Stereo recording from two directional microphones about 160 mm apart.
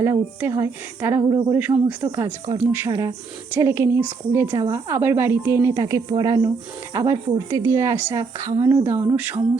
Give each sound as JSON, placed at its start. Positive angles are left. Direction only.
{"t": 0.0, "sound": "a woman's voice", "side_deg": -15}
{"t": 2.5, "sound": "a woman's voice", "side_deg": -20}